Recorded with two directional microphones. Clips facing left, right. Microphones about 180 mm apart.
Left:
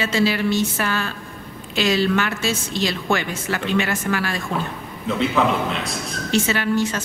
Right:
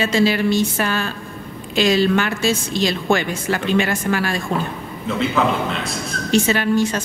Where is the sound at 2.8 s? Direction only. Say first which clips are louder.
Right 2 dB; 15° right (ahead or behind).